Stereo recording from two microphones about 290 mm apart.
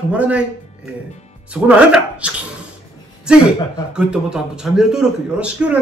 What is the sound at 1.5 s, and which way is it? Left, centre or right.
A man's voice, centre.